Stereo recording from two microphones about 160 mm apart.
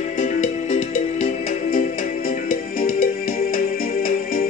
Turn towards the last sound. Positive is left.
turn(degrees=60)  # may be behind; listen again after turning